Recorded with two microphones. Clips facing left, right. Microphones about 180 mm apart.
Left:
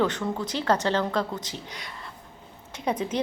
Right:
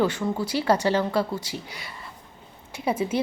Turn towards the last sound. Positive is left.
turn(degrees=-5)  # may be behind; listen again after turning